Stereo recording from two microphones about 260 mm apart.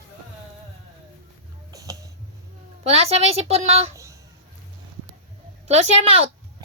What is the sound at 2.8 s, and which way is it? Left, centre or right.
Speech, right.